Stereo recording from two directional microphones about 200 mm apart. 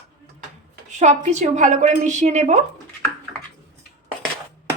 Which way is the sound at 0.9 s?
35° right (ahead or behind).